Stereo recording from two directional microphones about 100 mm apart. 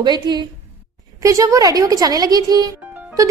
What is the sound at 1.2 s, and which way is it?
A woman's voice, 35° right (ahead or behind).